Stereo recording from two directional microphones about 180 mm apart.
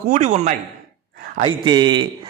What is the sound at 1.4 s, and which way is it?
Speech, 25° right (ahead or behind).